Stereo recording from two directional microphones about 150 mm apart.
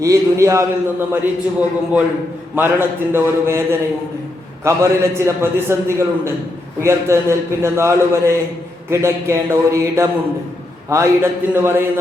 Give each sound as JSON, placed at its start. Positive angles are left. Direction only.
{"t": 0.0, "sound": "a man's voice", "side_deg": -20}